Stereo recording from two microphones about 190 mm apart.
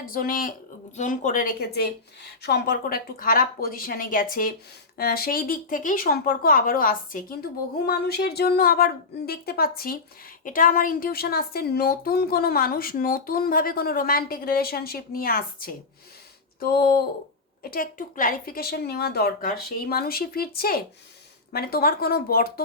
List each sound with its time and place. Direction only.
0.0 s a woman's voice: 50° left (ahead or behind)